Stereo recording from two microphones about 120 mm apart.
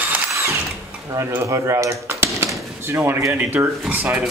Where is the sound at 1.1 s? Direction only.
30° right (ahead or behind).